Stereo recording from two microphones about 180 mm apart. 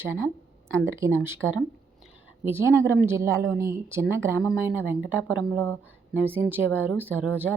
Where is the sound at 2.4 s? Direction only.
15° right (ahead or behind).